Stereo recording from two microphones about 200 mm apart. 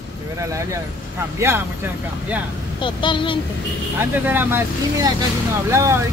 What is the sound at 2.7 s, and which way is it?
Speech, 25° left (ahead or behind).